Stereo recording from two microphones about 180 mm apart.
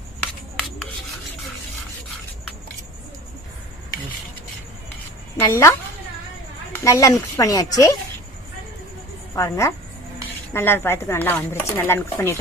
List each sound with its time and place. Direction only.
5.5 s speech: 15° left (ahead or behind)
6.8 s speech: 20° left (ahead or behind)
9.3 s a woman's voice: 15° left (ahead or behind)